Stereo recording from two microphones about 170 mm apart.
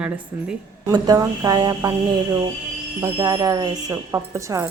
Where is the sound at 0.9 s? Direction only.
20° right (ahead or behind).